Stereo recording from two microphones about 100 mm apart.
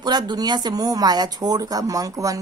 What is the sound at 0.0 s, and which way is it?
Speech, 45° right (ahead or behind).